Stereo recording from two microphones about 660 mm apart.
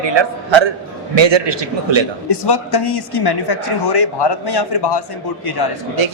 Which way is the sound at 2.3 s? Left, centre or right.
Left.